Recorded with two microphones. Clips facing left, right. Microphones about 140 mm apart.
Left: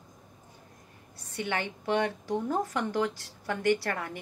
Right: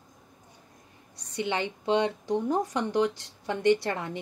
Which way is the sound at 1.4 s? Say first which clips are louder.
Right 3 dB; 20° right (ahead or behind).